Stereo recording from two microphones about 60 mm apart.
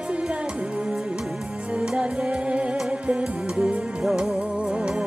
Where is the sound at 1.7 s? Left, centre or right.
Centre.